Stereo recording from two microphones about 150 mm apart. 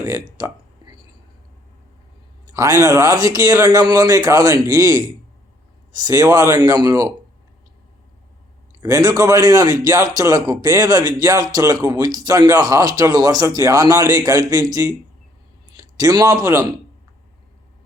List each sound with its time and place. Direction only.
0.0 s a sound: 25° right (ahead or behind)
2.5 s speech: 20° right (ahead or behind)
8.8 s a man's voice: 25° right (ahead or behind)